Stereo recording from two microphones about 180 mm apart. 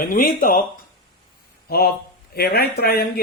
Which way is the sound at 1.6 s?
55° left (ahead or behind).